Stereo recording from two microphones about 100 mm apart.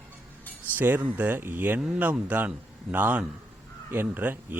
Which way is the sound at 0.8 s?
20° right (ahead or behind).